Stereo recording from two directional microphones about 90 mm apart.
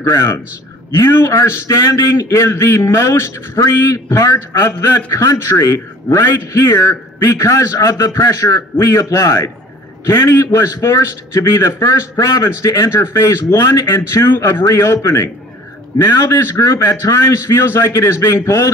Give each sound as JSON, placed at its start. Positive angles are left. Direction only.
{"t": 0.0, "sound": "a man's voice", "side_deg": 30}